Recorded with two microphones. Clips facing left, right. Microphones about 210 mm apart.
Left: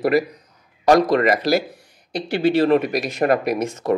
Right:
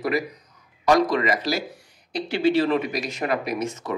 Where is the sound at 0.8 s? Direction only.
60° left (ahead or behind).